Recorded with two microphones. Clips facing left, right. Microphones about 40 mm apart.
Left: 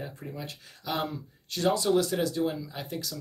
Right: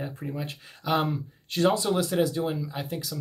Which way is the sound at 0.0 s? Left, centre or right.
Centre.